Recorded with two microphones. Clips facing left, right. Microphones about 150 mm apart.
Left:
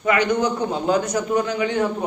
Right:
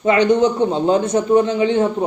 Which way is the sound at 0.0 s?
25° right (ahead or behind).